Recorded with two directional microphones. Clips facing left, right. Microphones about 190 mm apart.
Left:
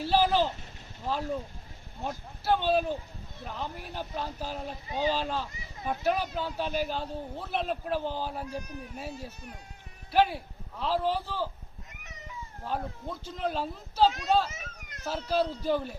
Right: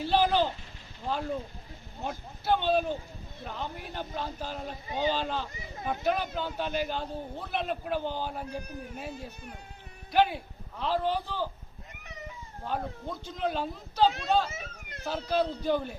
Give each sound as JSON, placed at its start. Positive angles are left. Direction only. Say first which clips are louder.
{"t": 0.0, "sound": "vehicle", "louder": "even", "side_deg": 5}
{"t": 1.0, "sound": "a man's voice", "louder": "even", "side_deg": 5}
{"t": 12.6, "sound": "speech", "louder": "right 1 dB", "side_deg": 0}
{"t": 14.5, "sound": "a sound", "louder": "right 3 dB", "side_deg": -30}
{"t": 15.0, "sound": "speech", "louder": "even", "side_deg": 5}